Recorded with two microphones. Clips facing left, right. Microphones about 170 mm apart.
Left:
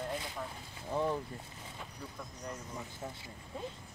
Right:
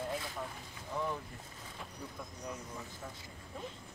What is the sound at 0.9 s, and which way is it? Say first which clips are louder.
Speech: left 4 dB; 30° left (ahead or behind).